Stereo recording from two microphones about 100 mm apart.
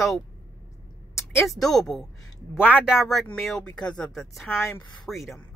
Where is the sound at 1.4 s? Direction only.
Centre (ahead or behind).